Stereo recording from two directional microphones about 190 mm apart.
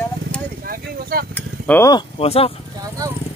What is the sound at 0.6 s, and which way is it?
Speech, 50° right (ahead or behind).